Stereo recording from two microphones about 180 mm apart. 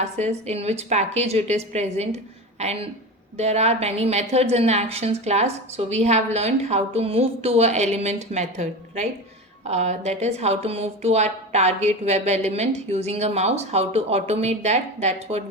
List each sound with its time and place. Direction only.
0.0 s a woman's voice: 35° right (ahead or behind)